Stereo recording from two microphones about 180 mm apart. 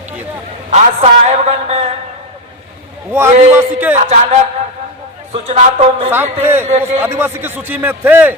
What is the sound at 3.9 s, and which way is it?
A man's voice, 40° right (ahead or behind).